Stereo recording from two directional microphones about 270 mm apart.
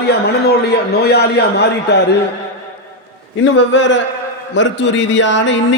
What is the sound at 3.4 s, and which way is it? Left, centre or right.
A man's voice, left.